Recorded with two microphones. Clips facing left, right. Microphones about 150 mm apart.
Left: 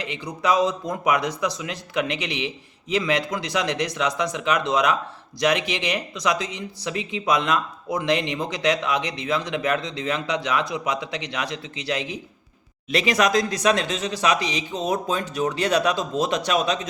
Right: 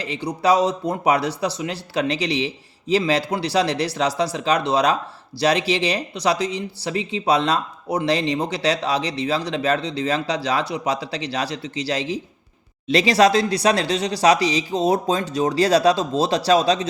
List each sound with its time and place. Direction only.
0.0 s speech: 35° right (ahead or behind)